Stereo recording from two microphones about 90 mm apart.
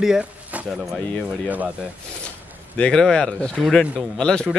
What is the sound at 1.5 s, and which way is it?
Speech, 15° right (ahead or behind).